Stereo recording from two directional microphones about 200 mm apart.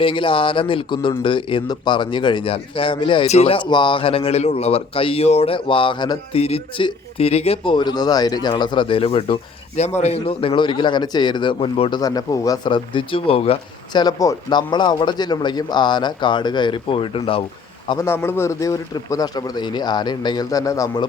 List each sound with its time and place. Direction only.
0.0 s a man's voice: 25° left (ahead or behind)
17.8 s a man's voice: 15° left (ahead or behind)